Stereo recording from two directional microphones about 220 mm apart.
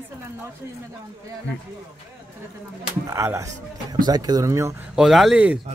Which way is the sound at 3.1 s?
15° right (ahead or behind).